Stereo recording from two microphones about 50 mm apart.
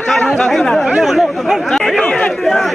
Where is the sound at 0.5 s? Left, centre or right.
Centre.